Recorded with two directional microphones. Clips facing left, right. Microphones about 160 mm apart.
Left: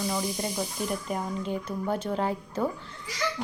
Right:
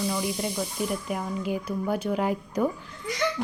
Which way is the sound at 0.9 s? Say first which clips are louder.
Right 1 dB; 5° right (ahead or behind).